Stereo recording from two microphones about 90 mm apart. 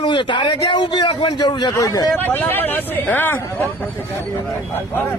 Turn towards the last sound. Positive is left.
turn(degrees=20)  # may be behind; listen again after turning